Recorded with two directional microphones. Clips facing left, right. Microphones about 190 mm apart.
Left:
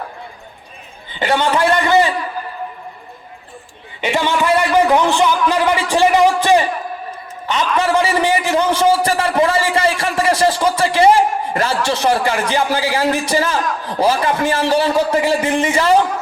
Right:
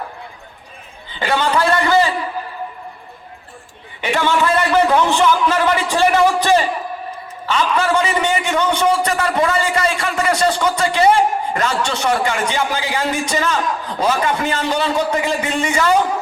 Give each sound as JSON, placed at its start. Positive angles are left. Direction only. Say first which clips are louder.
{"t": 1.2, "sound": "a sound", "louder": "left 2 dB", "side_deg": 20}
{"t": 4.0, "sound": "a man's voice", "louder": "even", "side_deg": 15}
{"t": 7.9, "sound": "a man's voice", "louder": "left 2 dB", "side_deg": 30}